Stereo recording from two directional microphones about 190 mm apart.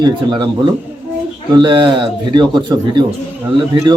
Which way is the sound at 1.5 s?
25° right (ahead or behind).